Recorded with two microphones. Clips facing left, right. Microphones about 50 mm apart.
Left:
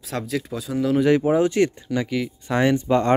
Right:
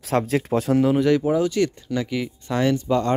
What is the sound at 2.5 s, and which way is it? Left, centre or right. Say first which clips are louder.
Speech: left 2 dB; left.